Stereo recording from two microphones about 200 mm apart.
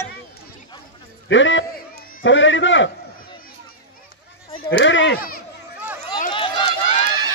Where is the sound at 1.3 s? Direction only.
70° left (ahead or behind).